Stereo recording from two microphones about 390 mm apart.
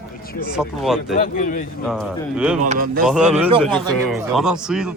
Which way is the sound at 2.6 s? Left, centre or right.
Centre.